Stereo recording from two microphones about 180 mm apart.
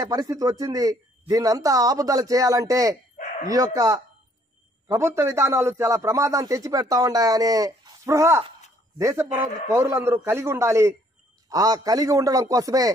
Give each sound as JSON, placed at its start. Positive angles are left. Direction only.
{"t": 0.0, "sound": "a man's voice", "side_deg": -20}